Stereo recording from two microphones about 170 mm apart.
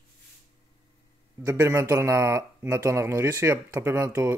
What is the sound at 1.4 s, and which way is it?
A man's voice, 15° right (ahead or behind).